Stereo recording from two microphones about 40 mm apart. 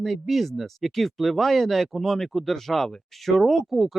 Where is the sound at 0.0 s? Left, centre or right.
Centre.